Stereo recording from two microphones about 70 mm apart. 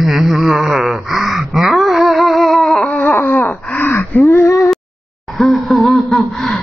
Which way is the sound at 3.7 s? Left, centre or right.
Left.